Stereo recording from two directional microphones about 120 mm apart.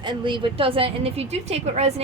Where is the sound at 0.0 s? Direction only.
40° right (ahead or behind).